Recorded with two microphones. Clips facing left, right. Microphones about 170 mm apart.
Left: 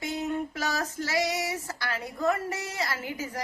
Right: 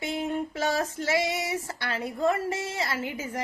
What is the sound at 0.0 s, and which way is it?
Female singing, 25° right (ahead or behind).